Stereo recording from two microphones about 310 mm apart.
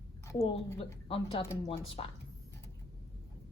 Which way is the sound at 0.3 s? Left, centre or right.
Centre.